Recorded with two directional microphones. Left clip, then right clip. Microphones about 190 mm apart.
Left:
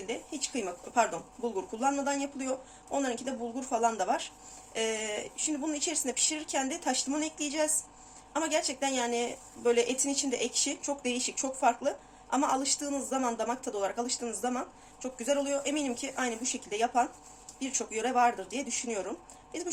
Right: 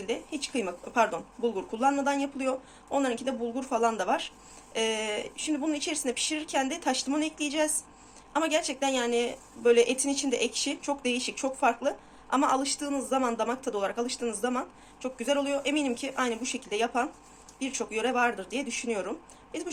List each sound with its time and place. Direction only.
0.1 s speech: 5° right (ahead or behind)